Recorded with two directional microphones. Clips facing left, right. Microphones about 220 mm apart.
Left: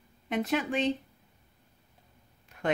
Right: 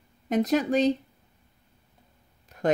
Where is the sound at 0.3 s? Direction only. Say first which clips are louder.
Right 6 dB; 40° right (ahead or behind).